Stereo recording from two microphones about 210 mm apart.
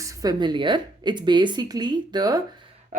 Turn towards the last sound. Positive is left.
turn(degrees=-35)  # may be behind; listen again after turning